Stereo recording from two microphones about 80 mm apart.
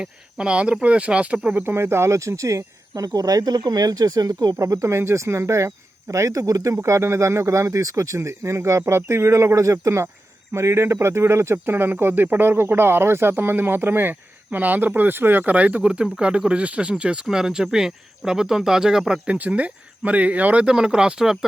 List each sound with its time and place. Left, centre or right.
0.0 s speech: centre
1.5 s speech: right
4.5 s speech: right
6.8 s speech: right; by 21.3 s centre